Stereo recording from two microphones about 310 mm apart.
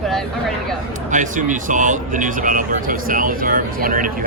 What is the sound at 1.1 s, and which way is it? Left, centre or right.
Speech, right.